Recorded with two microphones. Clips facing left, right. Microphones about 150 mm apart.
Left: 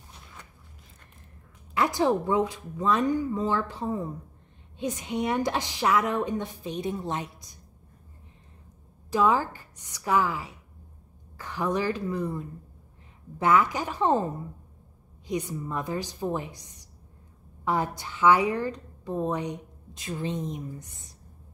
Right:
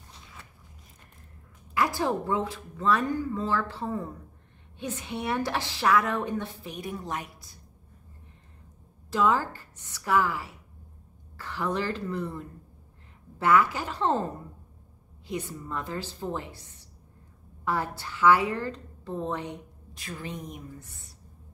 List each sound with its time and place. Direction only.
1.7 s a woman's voice: 20° left (ahead or behind)
9.1 s a woman's voice: 15° left (ahead or behind)